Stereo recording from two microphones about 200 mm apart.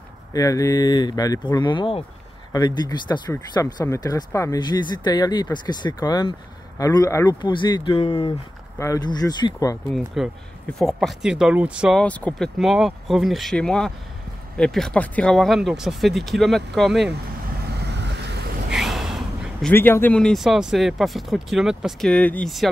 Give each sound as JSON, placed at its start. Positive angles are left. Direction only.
{"t": 0.3, "sound": "speech", "side_deg": 15}
{"t": 9.9, "sound": "speech", "side_deg": 0}
{"t": 17.8, "sound": "vehicle", "side_deg": -60}
{"t": 18.7, "sound": "gasp", "side_deg": 0}
{"t": 19.7, "sound": "speech", "side_deg": 10}